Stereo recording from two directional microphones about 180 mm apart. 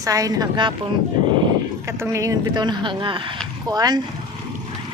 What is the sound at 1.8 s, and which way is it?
Speech, 15° right (ahead or behind).